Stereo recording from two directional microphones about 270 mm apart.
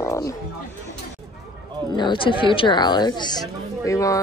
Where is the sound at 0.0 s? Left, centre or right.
Centre.